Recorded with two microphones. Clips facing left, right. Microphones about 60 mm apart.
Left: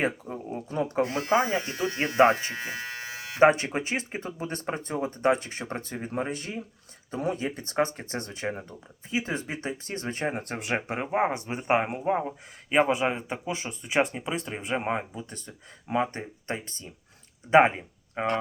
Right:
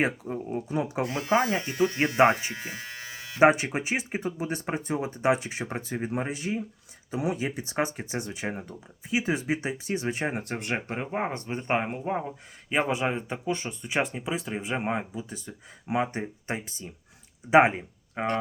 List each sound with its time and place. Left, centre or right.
0.5 s speech: centre
1.1 s speech: left
2.1 s speech: right
2.5 s speech: left
2.9 s electric shaver: left
3.4 s speech: centre